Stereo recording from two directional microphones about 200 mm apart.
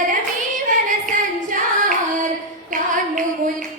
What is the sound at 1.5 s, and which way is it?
Singing, 40° right (ahead or behind).